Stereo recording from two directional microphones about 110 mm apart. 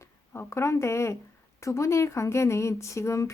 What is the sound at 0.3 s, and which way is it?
Speech, 25° left (ahead or behind).